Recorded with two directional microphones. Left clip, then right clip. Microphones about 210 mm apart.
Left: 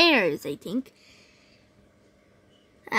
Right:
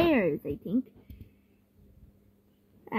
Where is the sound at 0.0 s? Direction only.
15° left (ahead or behind).